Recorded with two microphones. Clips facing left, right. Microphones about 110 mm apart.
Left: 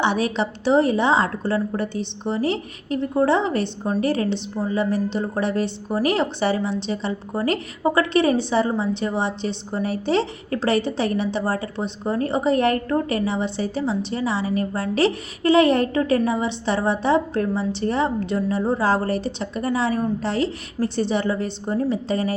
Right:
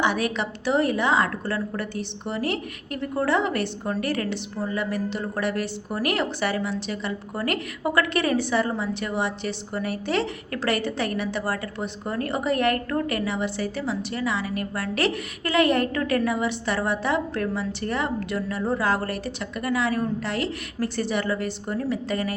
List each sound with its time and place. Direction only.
0.0 s a woman's voice: 30° left (ahead or behind)